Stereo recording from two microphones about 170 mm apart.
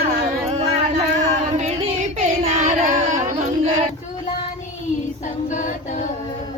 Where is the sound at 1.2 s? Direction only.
40° right (ahead or behind).